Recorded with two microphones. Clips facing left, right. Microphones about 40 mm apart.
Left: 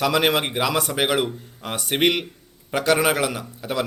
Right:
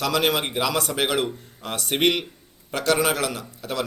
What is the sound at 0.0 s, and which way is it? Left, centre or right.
A man's voice, centre.